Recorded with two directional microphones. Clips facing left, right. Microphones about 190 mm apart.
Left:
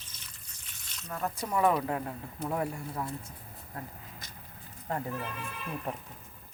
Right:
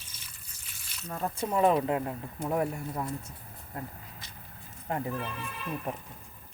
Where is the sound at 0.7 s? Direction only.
10° right (ahead or behind).